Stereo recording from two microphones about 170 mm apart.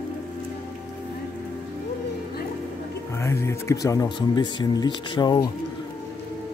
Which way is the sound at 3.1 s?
15° left (ahead or behind).